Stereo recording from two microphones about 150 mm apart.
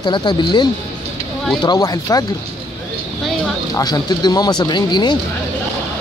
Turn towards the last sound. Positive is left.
turn(degrees=30)  # may be behind; listen again after turning